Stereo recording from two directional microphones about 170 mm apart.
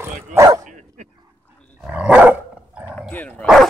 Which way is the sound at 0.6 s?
45° right (ahead or behind).